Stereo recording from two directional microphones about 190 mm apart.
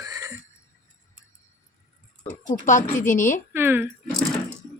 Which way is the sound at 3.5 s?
10° right (ahead or behind).